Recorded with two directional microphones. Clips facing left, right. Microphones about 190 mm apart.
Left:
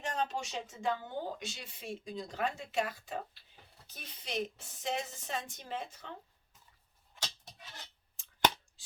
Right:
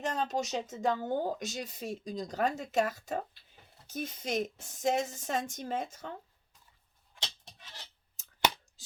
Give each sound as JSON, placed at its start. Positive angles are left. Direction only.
{"t": 0.0, "sound": "speech", "side_deg": -40}
{"t": 7.2, "sound": "goat", "side_deg": 0}
{"t": 8.2, "sound": "a sound", "side_deg": -40}